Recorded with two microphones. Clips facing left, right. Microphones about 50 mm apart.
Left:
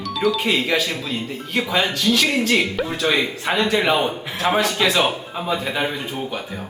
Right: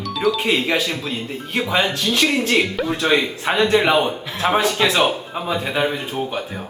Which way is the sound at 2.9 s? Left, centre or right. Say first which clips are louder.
Right 2 dB; right.